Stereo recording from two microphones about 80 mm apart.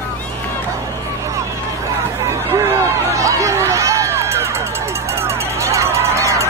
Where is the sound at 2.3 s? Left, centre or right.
Right.